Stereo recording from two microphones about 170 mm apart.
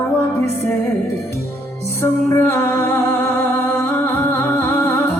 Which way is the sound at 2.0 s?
15° left (ahead or behind).